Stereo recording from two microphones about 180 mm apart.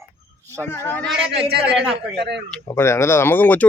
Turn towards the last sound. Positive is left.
turn(degrees=10)  # may be behind; listen again after turning